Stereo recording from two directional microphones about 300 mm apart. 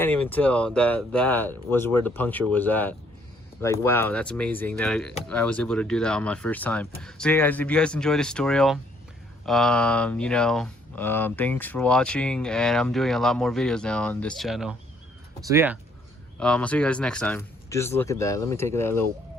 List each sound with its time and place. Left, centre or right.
0.0 s speech: centre
16.4 s speech: centre